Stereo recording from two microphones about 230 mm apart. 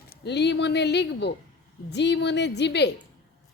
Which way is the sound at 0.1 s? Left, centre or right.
Left.